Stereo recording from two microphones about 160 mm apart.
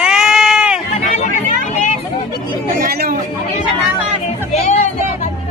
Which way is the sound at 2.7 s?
60° right (ahead or behind).